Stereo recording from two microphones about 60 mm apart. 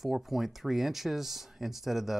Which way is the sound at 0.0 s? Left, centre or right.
Centre.